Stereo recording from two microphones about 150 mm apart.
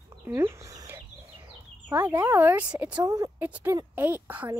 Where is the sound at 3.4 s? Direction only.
10° right (ahead or behind).